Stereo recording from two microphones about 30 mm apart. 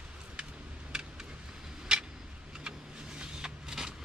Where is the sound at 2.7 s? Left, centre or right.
Right.